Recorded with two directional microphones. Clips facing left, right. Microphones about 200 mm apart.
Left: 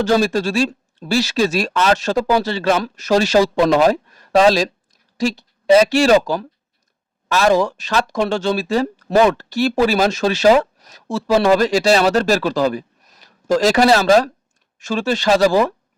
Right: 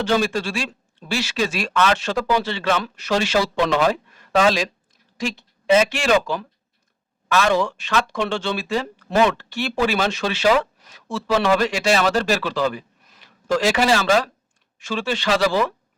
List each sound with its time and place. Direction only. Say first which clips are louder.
0.0 s speech: left 5 dB; 40° left (ahead or behind)